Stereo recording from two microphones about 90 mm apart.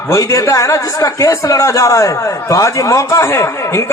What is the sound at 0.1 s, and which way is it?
A man's voice, 40° left (ahead or behind).